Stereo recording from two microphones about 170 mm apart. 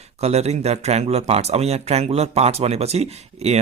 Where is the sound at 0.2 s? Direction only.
40° right (ahead or behind).